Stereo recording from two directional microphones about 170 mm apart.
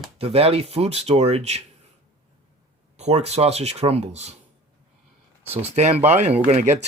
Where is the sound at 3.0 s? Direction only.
40° right (ahead or behind).